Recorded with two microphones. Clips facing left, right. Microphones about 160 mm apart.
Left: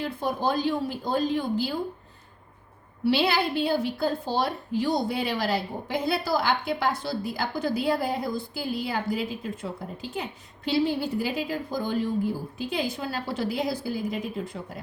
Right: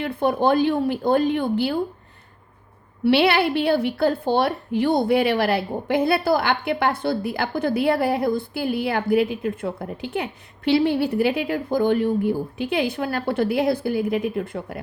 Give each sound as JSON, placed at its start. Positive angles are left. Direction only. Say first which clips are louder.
{"t": 0.0, "sound": "a woman's voice", "louder": "right 7 dB", "side_deg": -60}
{"t": 3.0, "sound": "a woman's voice", "louder": "right 6 dB", "side_deg": -65}